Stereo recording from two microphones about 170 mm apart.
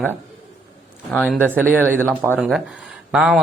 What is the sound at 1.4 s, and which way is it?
Speech, 10° right (ahead or behind).